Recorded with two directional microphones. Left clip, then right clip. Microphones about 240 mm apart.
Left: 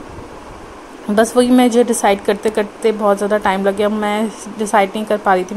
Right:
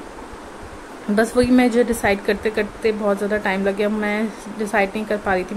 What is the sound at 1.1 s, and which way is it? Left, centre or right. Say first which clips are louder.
A woman's voice: left 5 dB; centre.